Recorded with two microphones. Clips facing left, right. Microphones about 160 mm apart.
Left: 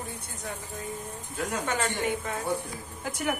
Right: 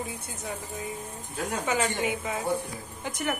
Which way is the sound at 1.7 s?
Centre (ahead or behind).